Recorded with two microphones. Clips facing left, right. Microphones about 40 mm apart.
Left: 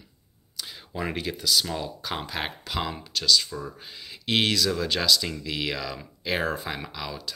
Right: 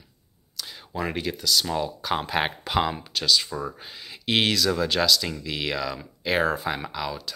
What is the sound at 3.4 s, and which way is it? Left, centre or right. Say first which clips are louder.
Speech: right 4 dB; right.